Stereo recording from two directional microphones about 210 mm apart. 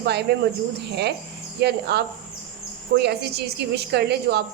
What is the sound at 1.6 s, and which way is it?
A woman's voice, 50° right (ahead or behind).